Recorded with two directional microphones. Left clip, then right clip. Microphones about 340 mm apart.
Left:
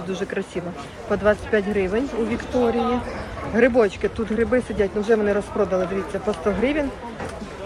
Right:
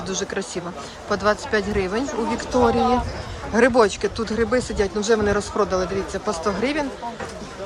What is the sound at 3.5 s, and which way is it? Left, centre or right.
Speech, centre.